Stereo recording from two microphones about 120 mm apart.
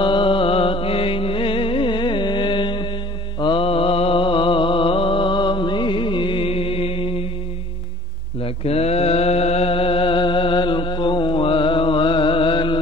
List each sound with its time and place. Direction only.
0.0 s music: 45° left (ahead or behind)
3.3 s mantra: 45° left (ahead or behind)
8.4 s mantra: 60° left (ahead or behind); by 12.7 s 45° left (ahead or behind)